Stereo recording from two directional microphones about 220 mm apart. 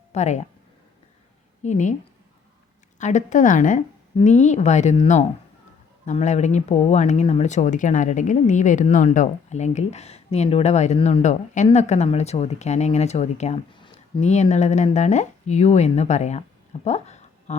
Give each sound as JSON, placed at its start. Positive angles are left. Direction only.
{"t": 0.1, "sound": "speech", "side_deg": 30}
{"t": 1.6, "sound": "speech", "side_deg": 35}
{"t": 3.0, "sound": "speech", "side_deg": 35}
{"t": 16.8, "sound": "a sound", "side_deg": 30}